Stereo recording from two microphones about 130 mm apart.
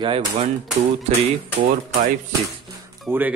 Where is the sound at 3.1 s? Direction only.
20° right (ahead or behind).